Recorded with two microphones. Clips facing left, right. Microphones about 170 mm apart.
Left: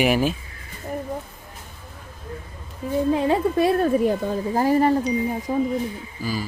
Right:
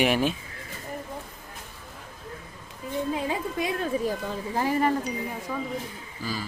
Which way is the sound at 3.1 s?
70° left (ahead or behind).